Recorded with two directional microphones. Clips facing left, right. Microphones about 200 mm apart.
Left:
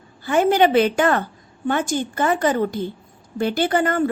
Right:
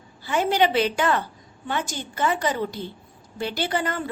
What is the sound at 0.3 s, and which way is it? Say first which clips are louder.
A woman's voice: left 5 dB; 50° left (ahead or behind).